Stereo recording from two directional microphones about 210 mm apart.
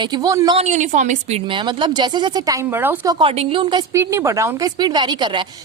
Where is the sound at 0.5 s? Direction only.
35° right (ahead or behind).